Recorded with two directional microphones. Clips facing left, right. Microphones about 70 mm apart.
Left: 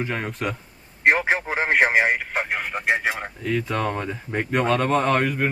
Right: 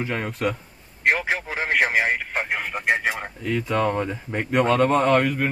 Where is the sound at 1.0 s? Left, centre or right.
Left.